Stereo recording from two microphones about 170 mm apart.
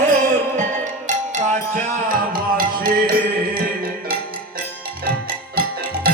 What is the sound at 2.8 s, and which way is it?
Mantra, 60° right (ahead or behind).